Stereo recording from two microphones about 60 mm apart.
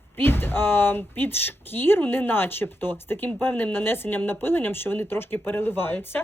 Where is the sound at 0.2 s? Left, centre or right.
Left.